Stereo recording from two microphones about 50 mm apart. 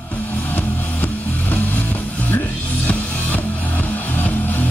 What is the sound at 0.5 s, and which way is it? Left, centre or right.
Music, left.